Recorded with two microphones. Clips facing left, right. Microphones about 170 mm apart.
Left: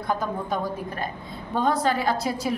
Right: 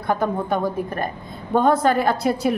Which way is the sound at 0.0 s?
60° right (ahead or behind).